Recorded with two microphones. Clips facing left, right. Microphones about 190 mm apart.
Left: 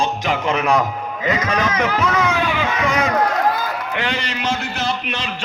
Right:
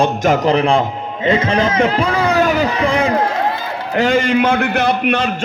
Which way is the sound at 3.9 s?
45° right (ahead or behind).